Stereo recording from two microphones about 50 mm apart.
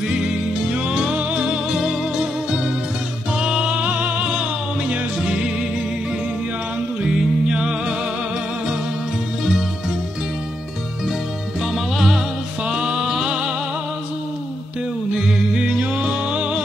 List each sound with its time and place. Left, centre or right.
0.7 s music: centre
3.3 s music: centre
7.4 s music: centre
9.4 s music: centre
11.6 s music: centre
12.6 s music: centre
15.1 s music: centre